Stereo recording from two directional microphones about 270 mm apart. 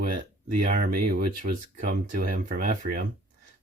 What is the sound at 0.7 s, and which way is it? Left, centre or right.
Speech, right.